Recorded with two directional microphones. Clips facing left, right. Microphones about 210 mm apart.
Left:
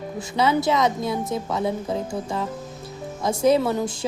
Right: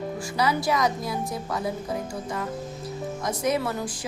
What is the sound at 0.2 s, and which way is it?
A woman's voice, 25° left (ahead or behind).